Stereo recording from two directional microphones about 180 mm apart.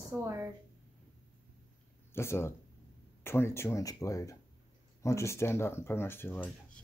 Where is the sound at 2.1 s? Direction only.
15° left (ahead or behind).